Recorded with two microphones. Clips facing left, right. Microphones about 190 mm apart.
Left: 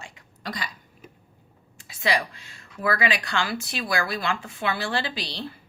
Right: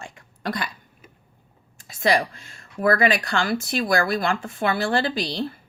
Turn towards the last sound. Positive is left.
turn(degrees=-45)  # may be behind; listen again after turning